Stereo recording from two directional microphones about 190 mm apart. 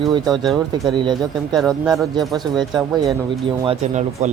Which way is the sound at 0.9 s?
25° right (ahead or behind).